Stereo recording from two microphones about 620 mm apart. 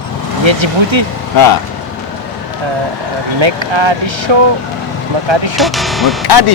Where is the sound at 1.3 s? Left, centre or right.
Left.